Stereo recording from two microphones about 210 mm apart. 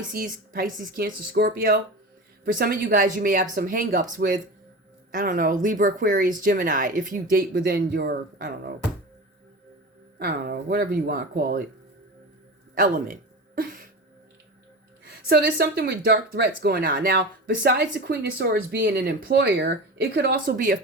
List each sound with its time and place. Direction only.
0.1 s speech: 40° right (ahead or behind)
10.2 s speech: 45° right (ahead or behind)
12.8 s speech: 40° right (ahead or behind)
15.3 s speech: 50° right (ahead or behind)